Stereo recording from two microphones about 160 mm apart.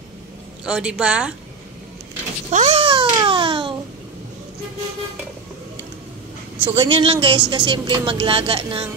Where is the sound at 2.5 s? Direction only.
40° right (ahead or behind).